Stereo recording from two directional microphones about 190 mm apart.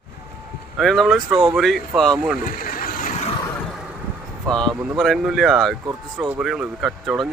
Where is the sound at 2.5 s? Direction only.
50° left (ahead or behind).